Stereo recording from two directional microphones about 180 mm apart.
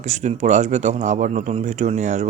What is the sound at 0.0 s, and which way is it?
Speech, 40° right (ahead or behind).